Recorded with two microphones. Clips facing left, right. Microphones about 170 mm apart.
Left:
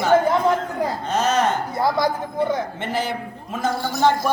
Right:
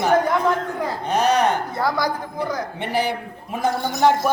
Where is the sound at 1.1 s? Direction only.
15° right (ahead or behind).